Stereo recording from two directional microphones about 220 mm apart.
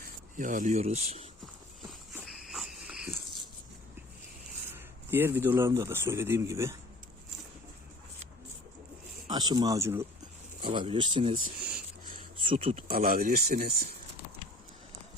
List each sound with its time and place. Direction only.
0.0 s speech: 35° right (ahead or behind)
2.4 s cricket: centre (ahead or behind)
4.7 s speech: 10° right (ahead or behind)
9.2 s speech: 20° right (ahead or behind)
10.7 s speech: 20° right (ahead or behind)
12.4 s speech: 25° right (ahead or behind)
13.1 s speech: 40° right (ahead or behind)